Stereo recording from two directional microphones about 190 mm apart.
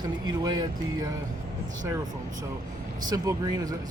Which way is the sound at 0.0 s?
20° right (ahead or behind).